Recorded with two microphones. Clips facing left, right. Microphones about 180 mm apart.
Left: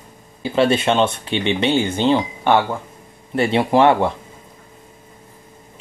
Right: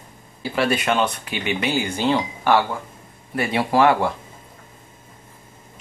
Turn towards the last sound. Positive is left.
turn(degrees=20)  # may be behind; listen again after turning